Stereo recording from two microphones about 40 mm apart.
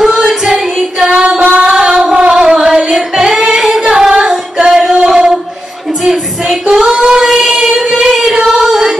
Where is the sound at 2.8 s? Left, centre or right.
Centre.